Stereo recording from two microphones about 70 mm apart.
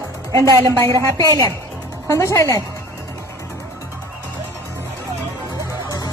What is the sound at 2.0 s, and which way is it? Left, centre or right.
Speech, left.